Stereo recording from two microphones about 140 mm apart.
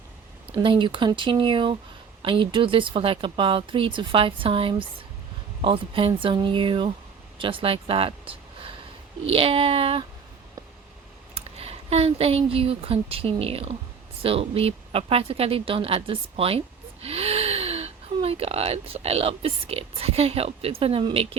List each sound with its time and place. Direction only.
0.5 s speech: 35° right (ahead or behind)
11.3 s a woman's voice: 45° right (ahead or behind)